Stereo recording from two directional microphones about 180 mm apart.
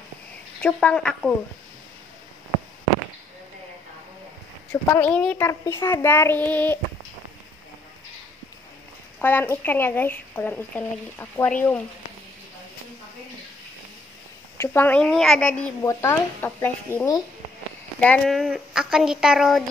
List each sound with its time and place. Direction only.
0.6 s speech: 5° left (ahead or behind)
4.8 s speech: 10° left (ahead or behind)
9.2 s speech: 10° left (ahead or behind)
14.6 s speech: 10° left (ahead or behind)
15.8 s speech: 15° left (ahead or behind)
18.0 s speech: 5° left (ahead or behind)